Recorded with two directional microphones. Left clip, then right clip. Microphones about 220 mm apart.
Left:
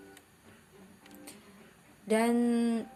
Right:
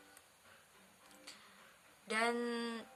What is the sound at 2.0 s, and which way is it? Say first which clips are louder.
Speech: left 8 dB; 5° right (ahead or behind).